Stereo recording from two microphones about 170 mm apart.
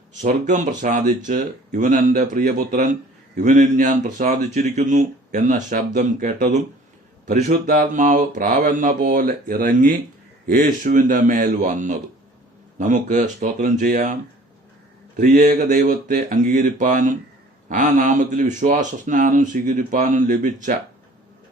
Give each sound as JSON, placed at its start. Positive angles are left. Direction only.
{"t": 0.2, "sound": "speech", "side_deg": -45}
{"t": 7.4, "sound": "mantra", "side_deg": -60}
{"t": 10.4, "sound": "speech", "side_deg": -55}